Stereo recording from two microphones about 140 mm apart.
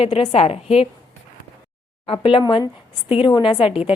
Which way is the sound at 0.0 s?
40° left (ahead or behind).